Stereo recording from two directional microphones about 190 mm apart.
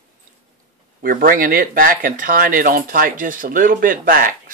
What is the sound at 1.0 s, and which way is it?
Speech, 50° right (ahead or behind).